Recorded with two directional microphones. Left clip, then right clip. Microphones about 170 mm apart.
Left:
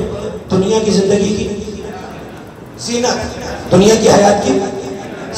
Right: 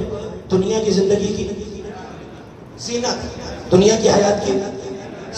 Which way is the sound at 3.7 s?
45° right (ahead or behind).